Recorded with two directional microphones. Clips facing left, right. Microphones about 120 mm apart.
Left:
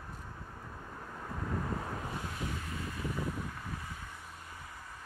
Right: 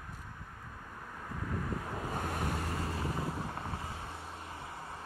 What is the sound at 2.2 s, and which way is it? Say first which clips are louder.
Vehicle: right 4 dB; 55° right (ahead or behind).